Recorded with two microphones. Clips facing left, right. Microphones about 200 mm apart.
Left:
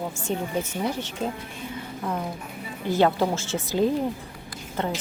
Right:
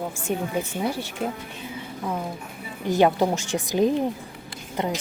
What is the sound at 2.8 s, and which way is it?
Speech, 15° right (ahead or behind).